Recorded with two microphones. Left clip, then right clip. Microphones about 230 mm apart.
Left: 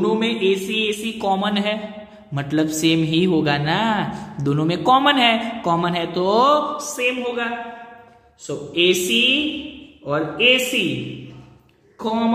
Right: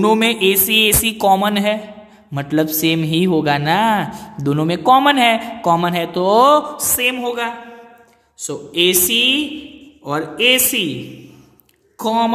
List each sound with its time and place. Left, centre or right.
0.0 s music: right
2.3 s a man's voice: right
7.0 s music: right
12.0 s music: right